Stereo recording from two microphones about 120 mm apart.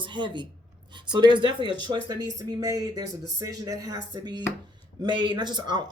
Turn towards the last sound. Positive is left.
turn(degrees=-40)  # may be behind; listen again after turning